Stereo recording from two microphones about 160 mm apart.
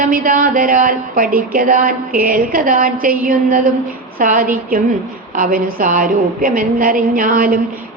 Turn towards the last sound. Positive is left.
turn(degrees=-60)  # may be behind; listen again after turning